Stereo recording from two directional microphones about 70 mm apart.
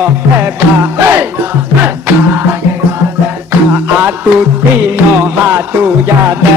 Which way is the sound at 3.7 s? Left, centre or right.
Right.